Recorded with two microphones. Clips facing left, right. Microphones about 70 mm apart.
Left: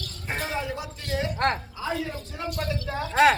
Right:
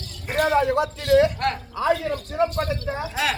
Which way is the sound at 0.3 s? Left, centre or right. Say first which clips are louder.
Right 12 dB; right.